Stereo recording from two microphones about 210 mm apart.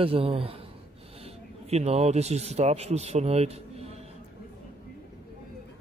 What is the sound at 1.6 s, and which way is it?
A man's voice, 30° right (ahead or behind).